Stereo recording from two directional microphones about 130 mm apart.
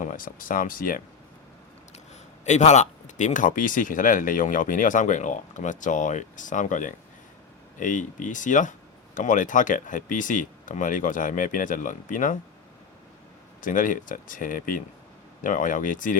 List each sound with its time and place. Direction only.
0.0 s speech: 90° left
2.4 s speech: 65° left (ahead or behind); by 12.4 s 90° left
13.6 s speech: 90° left